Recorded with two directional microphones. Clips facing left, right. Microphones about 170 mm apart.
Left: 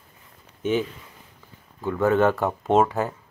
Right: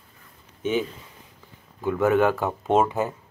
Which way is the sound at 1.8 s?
15° right (ahead or behind).